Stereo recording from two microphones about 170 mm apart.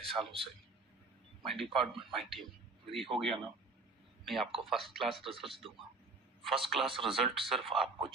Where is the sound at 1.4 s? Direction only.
Centre (ahead or behind).